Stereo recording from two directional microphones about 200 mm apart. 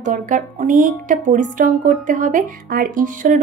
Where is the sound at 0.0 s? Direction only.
40° right (ahead or behind).